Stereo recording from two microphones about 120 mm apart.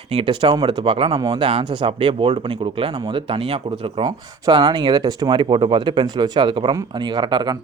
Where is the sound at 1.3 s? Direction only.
45° right (ahead or behind).